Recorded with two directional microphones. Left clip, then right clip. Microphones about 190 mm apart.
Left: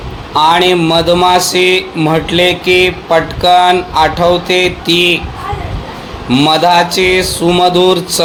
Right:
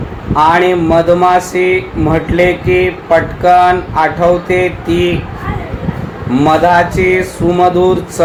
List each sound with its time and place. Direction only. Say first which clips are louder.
0.3 s speech: left 1 dB; 30° left (ahead or behind)
6.3 s a man's voice: even; 25° left (ahead or behind)